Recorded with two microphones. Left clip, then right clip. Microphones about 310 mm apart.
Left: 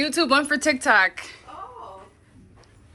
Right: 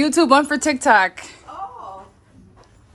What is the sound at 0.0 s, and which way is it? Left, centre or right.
Speech, right.